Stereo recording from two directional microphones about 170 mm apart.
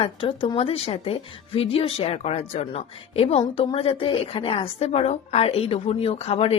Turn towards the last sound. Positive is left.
turn(degrees=35)  # may be behind; listen again after turning